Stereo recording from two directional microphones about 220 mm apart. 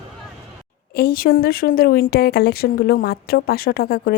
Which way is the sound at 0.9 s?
45° left (ahead or behind).